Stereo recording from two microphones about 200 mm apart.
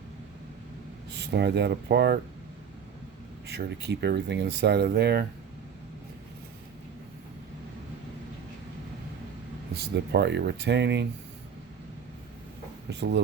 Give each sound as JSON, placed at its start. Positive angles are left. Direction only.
{"t": 1.1, "sound": "speech", "side_deg": -55}
{"t": 3.4, "sound": "speech", "side_deg": -55}
{"t": 9.7, "sound": "speech", "side_deg": -55}
{"t": 12.9, "sound": "speech", "side_deg": -60}